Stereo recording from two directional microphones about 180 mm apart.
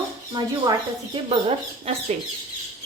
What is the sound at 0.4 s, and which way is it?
A woman's voice, 25° right (ahead or behind).